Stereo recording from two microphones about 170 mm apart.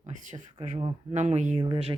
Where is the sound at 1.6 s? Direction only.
30° right (ahead or behind).